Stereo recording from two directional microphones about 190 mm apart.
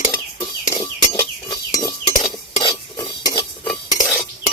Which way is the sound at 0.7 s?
15° left (ahead or behind).